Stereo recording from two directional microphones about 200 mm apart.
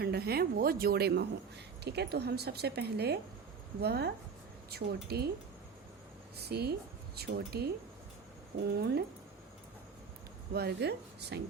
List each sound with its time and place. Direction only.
0.0 s a woman's voice: 50° right (ahead or behind)
6.5 s a woman's voice: 55° right (ahead or behind)
10.5 s speech: 55° right (ahead or behind)